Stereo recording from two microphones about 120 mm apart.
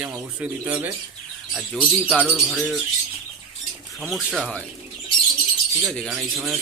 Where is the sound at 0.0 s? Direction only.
15° right (ahead or behind).